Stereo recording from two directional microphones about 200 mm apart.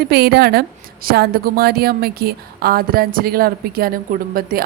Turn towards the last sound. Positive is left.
turn(degrees=-45)  # may be behind; listen again after turning